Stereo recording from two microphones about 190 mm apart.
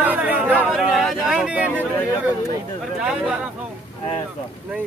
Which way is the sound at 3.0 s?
5° right (ahead or behind).